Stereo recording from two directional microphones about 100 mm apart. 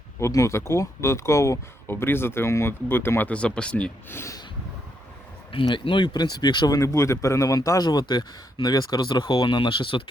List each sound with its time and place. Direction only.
0.2 s speech: 30° left (ahead or behind); by 3.9 s 10° left (ahead or behind)
4.1 s speech: 25° left (ahead or behind)
5.5 s speech: 55° left (ahead or behind)